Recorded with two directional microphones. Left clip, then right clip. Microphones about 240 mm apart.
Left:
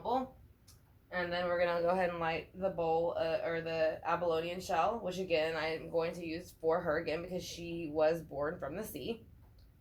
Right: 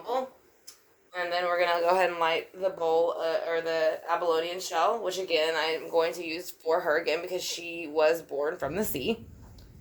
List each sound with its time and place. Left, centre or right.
1.3 s speech: right